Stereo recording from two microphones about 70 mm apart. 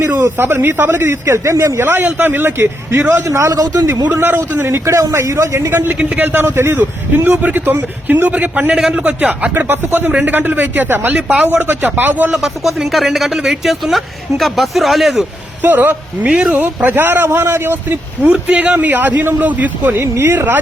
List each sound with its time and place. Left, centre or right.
0.3 s a man's voice: right
3.2 s a man's voice: right
4.1 s a man's voice: right
8.7 s a man's voice: centre; by 11.1 s right
11.1 s a man's voice: centre
12.3 s speech: centre
15.6 s a man's voice: right
20.0 s a man's voice: right